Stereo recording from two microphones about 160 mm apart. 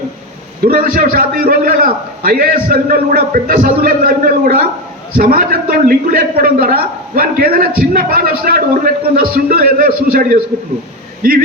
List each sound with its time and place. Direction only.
0.6 s a man's voice: 65° right (ahead or behind)